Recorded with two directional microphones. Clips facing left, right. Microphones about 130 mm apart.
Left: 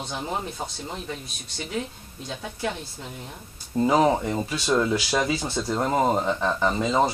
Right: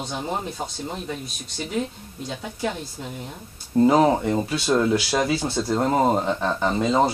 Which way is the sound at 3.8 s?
30° right (ahead or behind).